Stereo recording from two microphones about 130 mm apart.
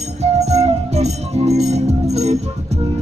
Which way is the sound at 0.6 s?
55° right (ahead or behind).